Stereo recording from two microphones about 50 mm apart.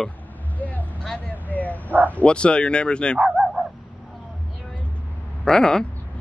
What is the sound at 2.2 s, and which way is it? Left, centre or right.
Speech, centre.